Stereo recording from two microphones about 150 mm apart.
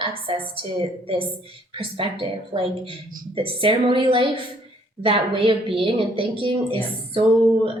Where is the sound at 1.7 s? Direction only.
35° right (ahead or behind).